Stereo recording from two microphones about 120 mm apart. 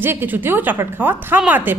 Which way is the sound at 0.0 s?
20° right (ahead or behind).